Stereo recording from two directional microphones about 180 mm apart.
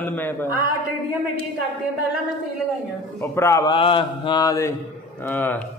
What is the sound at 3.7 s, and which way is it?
A man's voice, 30° left (ahead or behind).